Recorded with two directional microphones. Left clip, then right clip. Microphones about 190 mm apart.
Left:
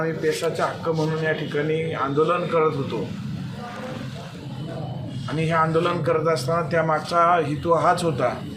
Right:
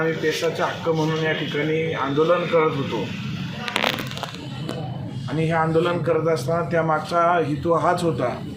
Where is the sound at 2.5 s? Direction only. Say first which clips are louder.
Even; 20° left (ahead or behind).